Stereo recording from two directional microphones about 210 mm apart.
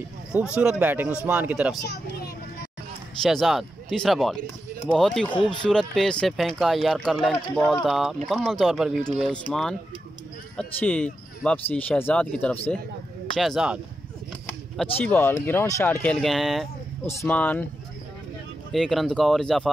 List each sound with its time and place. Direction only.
0.6 s speech: 5° right (ahead or behind)
3.2 s speech: centre (ahead or behind)
5.3 s speech: 20° left (ahead or behind)
5.6 s speech: centre (ahead or behind)
15.0 s speech: 10° left (ahead or behind)
18.7 s speech: centre (ahead or behind)